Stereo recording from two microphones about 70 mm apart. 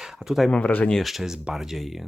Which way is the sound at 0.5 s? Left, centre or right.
Left.